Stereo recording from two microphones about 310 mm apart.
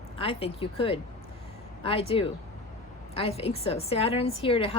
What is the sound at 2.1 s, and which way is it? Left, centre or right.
A woman's voice, centre.